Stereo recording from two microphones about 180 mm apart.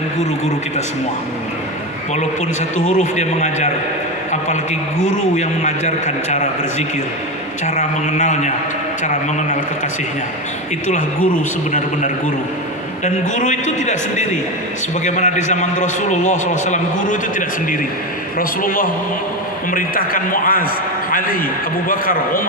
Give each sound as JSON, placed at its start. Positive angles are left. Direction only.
{"t": 2.7, "sound": "a man's voice", "side_deg": 40}
{"t": 13.3, "sound": "a man's voice", "side_deg": 40}